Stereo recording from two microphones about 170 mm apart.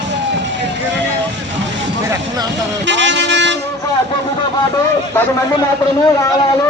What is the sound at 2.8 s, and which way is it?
Vehicle, 90° right.